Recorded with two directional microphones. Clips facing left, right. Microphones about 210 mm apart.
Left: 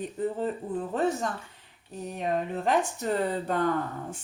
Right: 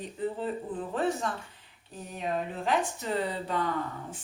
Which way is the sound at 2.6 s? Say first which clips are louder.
Left 2 dB; 50° left (ahead or behind).